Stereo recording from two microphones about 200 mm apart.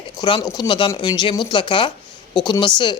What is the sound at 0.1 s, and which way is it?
Speech, 20° left (ahead or behind).